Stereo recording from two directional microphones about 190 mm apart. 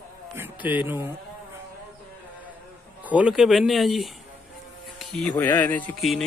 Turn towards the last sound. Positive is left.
turn(degrees=5)  # may be behind; listen again after turning